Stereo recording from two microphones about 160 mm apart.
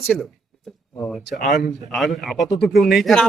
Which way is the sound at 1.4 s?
65° left (ahead or behind).